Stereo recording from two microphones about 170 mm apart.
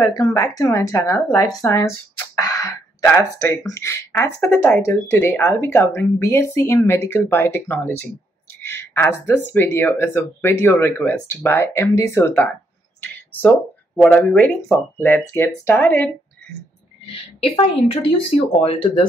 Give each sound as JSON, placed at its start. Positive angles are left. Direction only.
{"t": 0.0, "sound": "speech", "side_deg": 20}
{"t": 2.3, "sound": "a sound", "side_deg": 20}
{"t": 3.3, "sound": "speech", "side_deg": 15}
{"t": 14.0, "sound": "speech", "side_deg": 10}
{"t": 17.5, "sound": "speech", "side_deg": 30}